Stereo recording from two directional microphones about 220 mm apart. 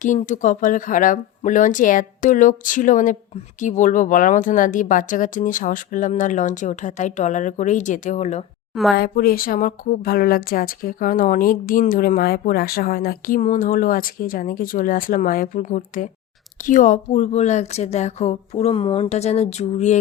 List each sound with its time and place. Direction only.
0.0 s a woman's voice: 35° left (ahead or behind)
8.7 s speech: centre (ahead or behind)
9.0 s a woman's voice: 40° left (ahead or behind)